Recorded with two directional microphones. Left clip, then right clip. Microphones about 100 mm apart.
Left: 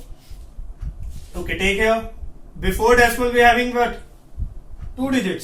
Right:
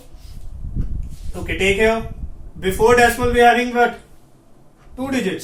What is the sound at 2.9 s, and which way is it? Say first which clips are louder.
Speech: even; 50° right (ahead or behind).